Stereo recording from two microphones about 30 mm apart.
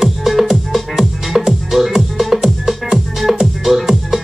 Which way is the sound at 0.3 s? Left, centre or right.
Centre.